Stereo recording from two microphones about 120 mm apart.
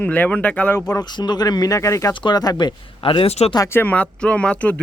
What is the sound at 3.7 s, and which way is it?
Speech, 15° left (ahead or behind).